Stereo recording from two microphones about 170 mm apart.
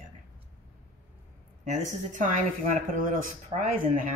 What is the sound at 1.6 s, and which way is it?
Speech, 50° right (ahead or behind).